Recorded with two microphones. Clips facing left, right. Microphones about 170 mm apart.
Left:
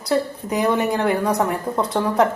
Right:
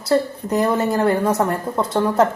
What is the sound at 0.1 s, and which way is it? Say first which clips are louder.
A woman's voice: right 3 dB; centre (ahead or behind).